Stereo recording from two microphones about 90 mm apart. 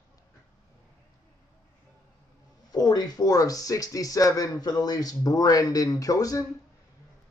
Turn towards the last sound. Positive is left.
turn(degrees=40)  # may be behind; listen again after turning